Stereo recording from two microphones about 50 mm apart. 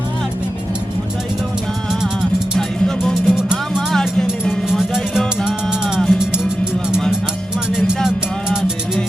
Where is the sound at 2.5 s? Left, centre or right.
Centre.